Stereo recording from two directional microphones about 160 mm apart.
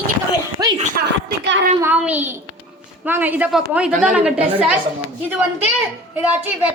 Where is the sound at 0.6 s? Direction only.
25° right (ahead or behind).